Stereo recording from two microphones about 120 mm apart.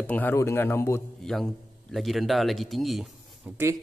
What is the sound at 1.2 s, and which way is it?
A man's voice, 5° left (ahead or behind).